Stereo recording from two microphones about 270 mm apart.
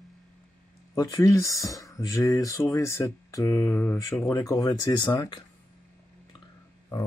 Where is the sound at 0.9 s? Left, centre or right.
Centre.